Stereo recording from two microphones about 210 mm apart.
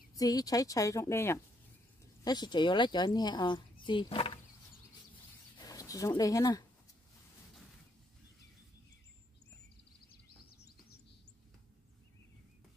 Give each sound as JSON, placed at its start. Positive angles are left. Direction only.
{"t": 0.1, "sound": "a woman's voice", "side_deg": 15}
{"t": 5.6, "sound": "speech", "side_deg": 15}
{"t": 10.4, "sound": "a sound", "side_deg": 45}